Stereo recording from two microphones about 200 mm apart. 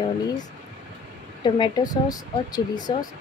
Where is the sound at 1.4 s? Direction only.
20° left (ahead or behind).